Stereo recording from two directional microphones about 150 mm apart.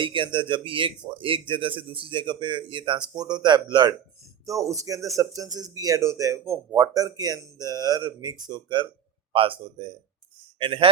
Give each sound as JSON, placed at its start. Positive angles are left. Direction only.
{"t": 0.0, "sound": "speech", "side_deg": -35}